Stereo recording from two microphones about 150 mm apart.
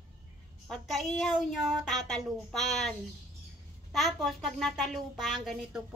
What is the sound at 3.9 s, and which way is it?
A woman's voice, centre (ahead or behind).